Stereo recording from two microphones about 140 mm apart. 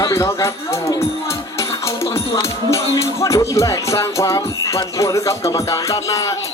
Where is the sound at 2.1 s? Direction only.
20° left (ahead or behind).